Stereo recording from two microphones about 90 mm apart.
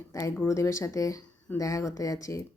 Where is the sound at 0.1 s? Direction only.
35° left (ahead or behind).